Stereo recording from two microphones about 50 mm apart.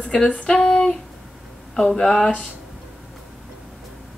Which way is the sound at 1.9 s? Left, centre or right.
Centre.